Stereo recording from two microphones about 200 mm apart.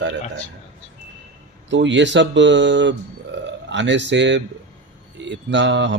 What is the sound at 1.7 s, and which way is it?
Speech, 65° right (ahead or behind).